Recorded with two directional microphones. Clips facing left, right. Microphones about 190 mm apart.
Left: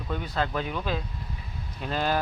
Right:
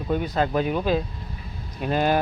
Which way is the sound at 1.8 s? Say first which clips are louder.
Right 6 dB; 15° right (ahead or behind).